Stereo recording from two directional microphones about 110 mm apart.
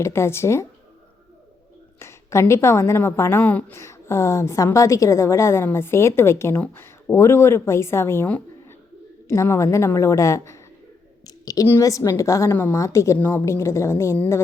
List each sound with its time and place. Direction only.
0.0 s a woman's voice: 25° left (ahead or behind)
2.0 s a woman's voice: 25° left (ahead or behind)
11.3 s a sound: 35° left (ahead or behind)
11.8 s a woman's voice: 30° left (ahead or behind)
13.1 s a woman's voice: 15° left (ahead or behind)